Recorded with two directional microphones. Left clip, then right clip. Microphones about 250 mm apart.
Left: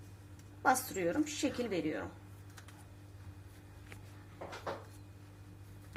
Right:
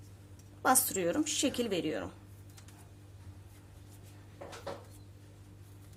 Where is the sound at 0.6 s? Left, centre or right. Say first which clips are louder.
Right 2 dB; right.